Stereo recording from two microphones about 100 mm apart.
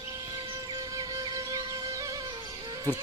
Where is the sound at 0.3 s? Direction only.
40° right (ahead or behind).